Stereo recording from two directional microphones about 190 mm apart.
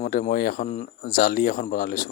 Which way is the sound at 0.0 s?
45° left (ahead or behind).